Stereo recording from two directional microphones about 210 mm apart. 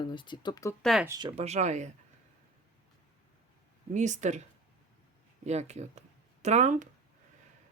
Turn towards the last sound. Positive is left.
turn(degrees=-35)  # may be behind; listen again after turning